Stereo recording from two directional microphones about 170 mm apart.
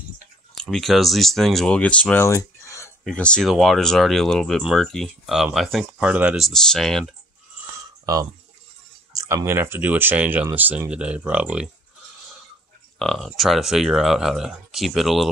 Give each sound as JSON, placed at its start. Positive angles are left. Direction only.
{"t": 0.6, "sound": "speech", "side_deg": 0}
{"t": 3.0, "sound": "speech", "side_deg": 5}
{"t": 8.0, "sound": "speech", "side_deg": -20}
{"t": 13.0, "sound": "speech", "side_deg": 0}